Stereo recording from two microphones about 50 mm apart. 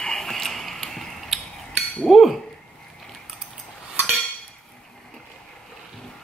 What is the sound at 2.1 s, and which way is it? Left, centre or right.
Chink, centre.